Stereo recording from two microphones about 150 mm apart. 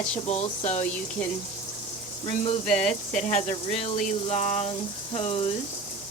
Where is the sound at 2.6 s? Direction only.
5° left (ahead or behind).